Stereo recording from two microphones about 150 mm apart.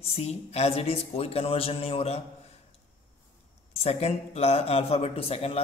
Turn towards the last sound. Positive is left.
turn(degrees=40)  # may be behind; listen again after turning